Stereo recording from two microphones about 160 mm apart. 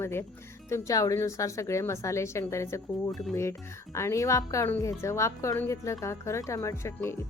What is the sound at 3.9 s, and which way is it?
Speech, 20° left (ahead or behind).